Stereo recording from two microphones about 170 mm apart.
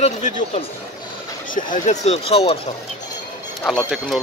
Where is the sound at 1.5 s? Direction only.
50° left (ahead or behind).